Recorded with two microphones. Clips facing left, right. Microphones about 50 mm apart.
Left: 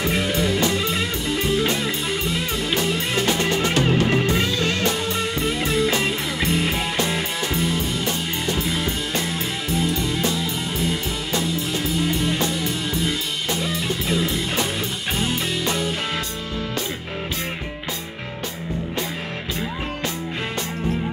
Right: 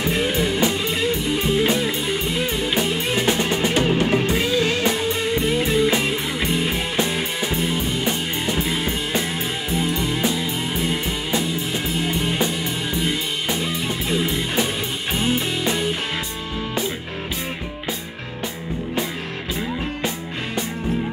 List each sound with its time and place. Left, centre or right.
0.2 s music: right
2.7 s music: centre
7.2 s music: centre
12.2 s music: right
15.4 s music: right